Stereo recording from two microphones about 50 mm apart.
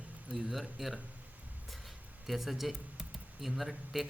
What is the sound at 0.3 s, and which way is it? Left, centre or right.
A man's voice, centre.